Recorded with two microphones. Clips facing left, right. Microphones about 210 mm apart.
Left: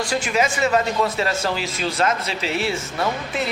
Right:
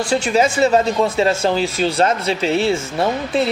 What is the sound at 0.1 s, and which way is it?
Speech, 30° right (ahead or behind).